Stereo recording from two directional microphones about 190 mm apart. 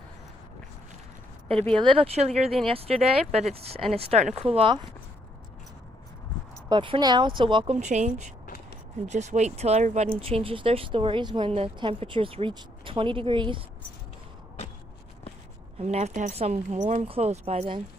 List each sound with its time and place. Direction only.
1.8 s speech: 30° right (ahead or behind)
6.7 s speech: 25° right (ahead or behind)
10.2 s speech: 30° right (ahead or behind)
15.8 s speech: 35° right (ahead or behind)